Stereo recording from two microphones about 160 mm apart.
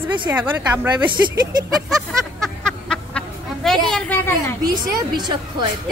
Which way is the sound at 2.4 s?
5° left (ahead or behind).